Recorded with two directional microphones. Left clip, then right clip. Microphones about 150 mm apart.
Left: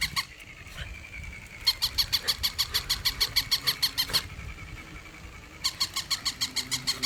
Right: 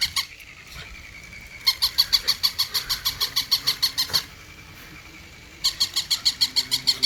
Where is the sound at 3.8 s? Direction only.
35° left (ahead or behind).